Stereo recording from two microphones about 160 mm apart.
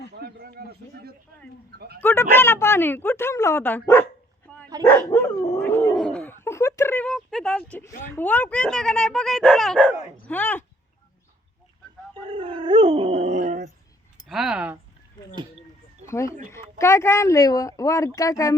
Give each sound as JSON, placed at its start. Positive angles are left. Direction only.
{"t": 0.2, "sound": "a sound", "side_deg": -75}
{"t": 2.0, "sound": "a woman's voice", "side_deg": 15}
{"t": 5.9, "sound": "a sound", "side_deg": 5}
{"t": 7.1, "sound": "a woman's voice", "side_deg": 5}
{"t": 12.1, "sound": "dog", "side_deg": -35}
{"t": 14.3, "sound": "speech", "side_deg": -5}
{"t": 16.0, "sound": "speech", "side_deg": 15}